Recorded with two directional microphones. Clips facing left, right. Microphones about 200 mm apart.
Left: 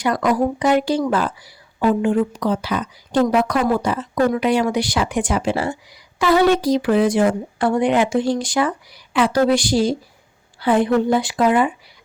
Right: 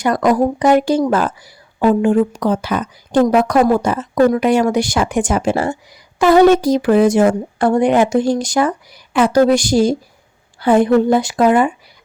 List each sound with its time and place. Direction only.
0.0 s a woman's voice: 45° right (ahead or behind)